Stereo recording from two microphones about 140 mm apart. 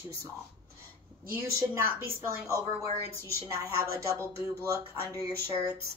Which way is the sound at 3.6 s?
20° right (ahead or behind).